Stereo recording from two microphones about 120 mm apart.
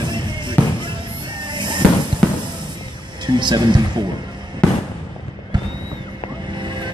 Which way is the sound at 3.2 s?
40° right (ahead or behind).